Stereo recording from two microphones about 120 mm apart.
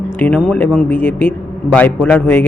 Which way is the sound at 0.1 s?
15° left (ahead or behind).